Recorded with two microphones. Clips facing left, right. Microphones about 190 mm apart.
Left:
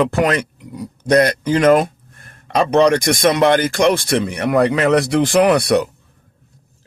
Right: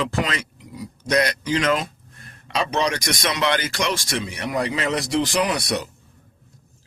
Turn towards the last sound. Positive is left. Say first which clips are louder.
# left 10 dB
turn(degrees=60)  # may be behind; listen again after turning